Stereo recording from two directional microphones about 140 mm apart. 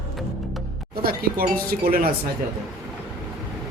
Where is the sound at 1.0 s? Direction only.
90° right.